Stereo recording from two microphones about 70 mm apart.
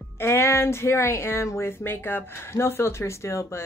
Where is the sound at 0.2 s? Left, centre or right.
Left.